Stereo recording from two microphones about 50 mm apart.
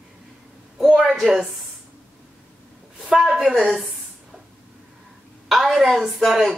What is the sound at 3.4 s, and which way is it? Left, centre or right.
Speech, centre.